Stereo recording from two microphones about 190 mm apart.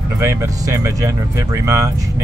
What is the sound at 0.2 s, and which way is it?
Speech, 15° right (ahead or behind).